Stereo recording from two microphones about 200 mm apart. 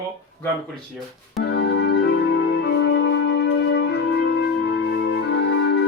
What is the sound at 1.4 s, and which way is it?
Music, 60° left (ahead or behind).